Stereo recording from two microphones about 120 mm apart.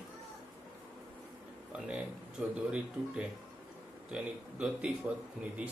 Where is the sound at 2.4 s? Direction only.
10° right (ahead or behind).